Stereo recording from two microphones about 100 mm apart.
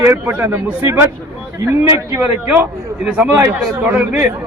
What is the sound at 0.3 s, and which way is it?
A man's voice, 20° right (ahead or behind).